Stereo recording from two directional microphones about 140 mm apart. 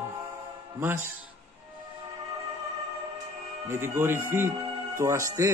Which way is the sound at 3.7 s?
15° right (ahead or behind).